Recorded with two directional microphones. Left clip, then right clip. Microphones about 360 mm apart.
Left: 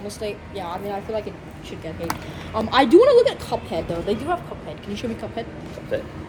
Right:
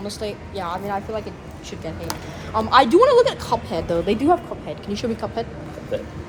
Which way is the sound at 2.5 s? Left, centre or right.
Centre.